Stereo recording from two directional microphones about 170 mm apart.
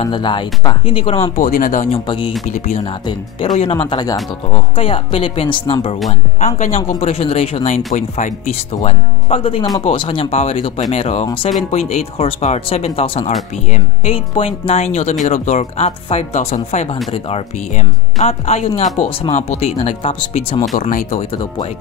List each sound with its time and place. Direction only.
0.0 s speech: 30° left (ahead or behind)
1.3 s speech: 55° left (ahead or behind)
2.0 s speech: 30° left (ahead or behind)
2.4 s speech: 45° left (ahead or behind)
3.1 s speech: 25° left (ahead or behind)